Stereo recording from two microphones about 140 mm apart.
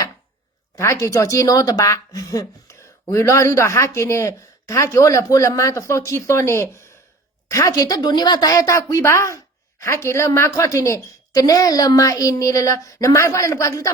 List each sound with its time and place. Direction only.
0.8 s speech: 20° left (ahead or behind)